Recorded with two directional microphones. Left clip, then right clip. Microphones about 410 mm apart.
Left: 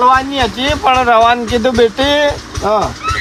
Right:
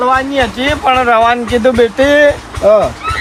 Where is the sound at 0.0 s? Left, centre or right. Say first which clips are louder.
Left 1 dB; left.